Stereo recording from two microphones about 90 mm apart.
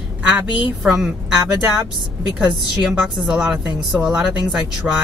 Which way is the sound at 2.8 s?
10° right (ahead or behind).